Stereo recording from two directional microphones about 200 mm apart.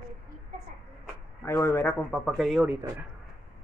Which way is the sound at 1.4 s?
15° left (ahead or behind).